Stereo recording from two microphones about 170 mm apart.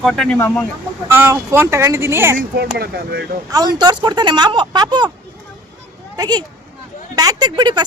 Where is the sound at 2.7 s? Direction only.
65° right (ahead or behind).